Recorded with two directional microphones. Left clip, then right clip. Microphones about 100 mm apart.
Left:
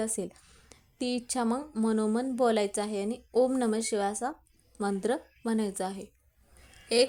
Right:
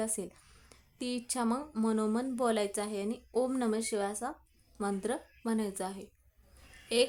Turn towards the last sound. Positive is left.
turn(degrees=35)  # may be behind; listen again after turning